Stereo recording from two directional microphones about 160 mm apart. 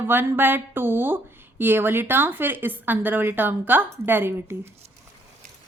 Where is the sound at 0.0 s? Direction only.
15° right (ahead or behind).